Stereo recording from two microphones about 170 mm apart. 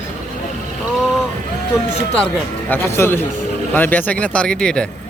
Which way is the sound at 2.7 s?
15° left (ahead or behind).